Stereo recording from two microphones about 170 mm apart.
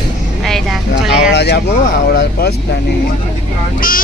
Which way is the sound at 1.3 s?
75° left (ahead or behind).